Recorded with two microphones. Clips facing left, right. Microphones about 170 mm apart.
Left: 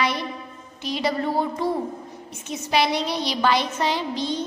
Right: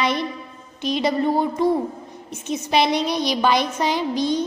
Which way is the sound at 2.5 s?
20° right (ahead or behind).